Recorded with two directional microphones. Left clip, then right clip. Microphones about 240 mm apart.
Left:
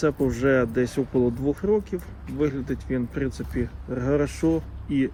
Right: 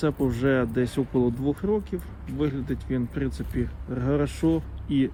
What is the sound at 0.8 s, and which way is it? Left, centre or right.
Speech, right.